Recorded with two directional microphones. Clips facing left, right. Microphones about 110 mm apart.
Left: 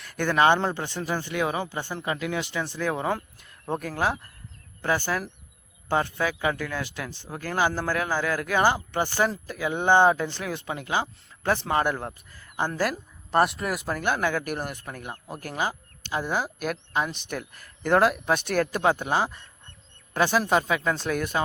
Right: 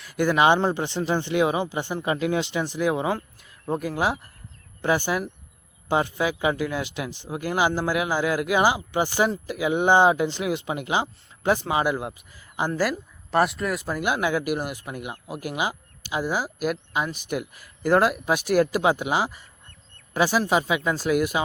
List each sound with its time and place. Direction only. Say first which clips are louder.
0.0 s a man's voice: right 2 dB; 5° right (ahead or behind)